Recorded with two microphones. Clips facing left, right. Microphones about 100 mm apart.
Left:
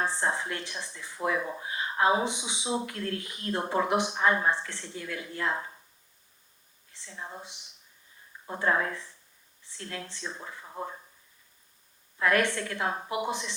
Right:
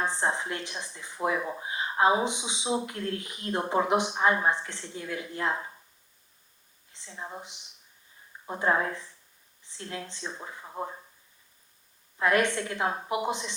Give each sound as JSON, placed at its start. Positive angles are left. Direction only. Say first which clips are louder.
{"t": 0.0, "sound": "speech", "louder": "right 1 dB", "side_deg": -20}
{"t": 6.9, "sound": "speech", "louder": "right 1 dB", "side_deg": -20}
{"t": 12.1, "sound": "speech", "louder": "right 1 dB", "side_deg": -20}